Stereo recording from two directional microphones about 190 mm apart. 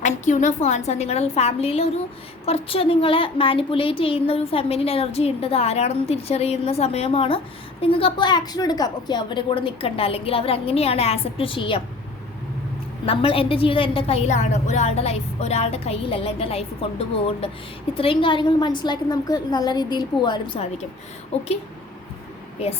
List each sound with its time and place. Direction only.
0.0 s a woman's voice: 40° left (ahead or behind)
13.1 s a woman's voice: 30° left (ahead or behind)